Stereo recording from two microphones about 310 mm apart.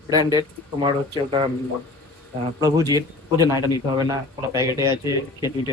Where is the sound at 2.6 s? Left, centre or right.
Centre.